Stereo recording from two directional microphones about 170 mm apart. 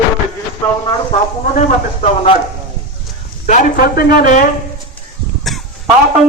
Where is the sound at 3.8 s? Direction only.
60° left (ahead or behind).